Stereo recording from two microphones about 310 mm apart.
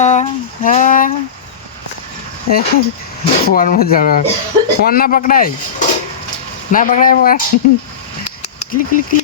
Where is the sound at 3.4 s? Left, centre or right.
Left.